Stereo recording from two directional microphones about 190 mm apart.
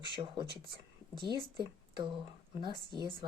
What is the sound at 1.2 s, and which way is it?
Speech, 25° right (ahead or behind).